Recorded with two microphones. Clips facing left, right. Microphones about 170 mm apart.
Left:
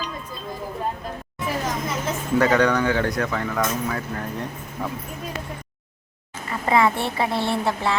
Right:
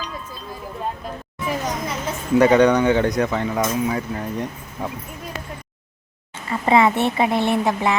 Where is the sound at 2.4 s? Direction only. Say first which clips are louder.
Right 5 dB; 20° right (ahead or behind).